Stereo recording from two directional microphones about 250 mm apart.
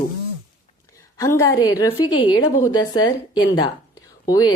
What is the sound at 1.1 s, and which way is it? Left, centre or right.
A woman's voice, centre.